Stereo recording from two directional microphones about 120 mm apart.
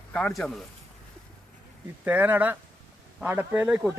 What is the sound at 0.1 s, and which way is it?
Speech, 5° left (ahead or behind).